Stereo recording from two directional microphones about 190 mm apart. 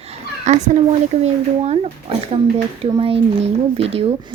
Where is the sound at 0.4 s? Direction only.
40° right (ahead or behind).